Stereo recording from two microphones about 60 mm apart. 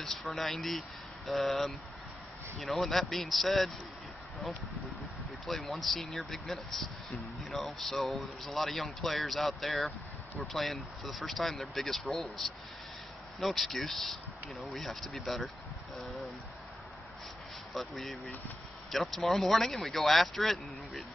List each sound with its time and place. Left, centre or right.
0.0 s speech: centre
5.5 s speech: centre
17.7 s speech: centre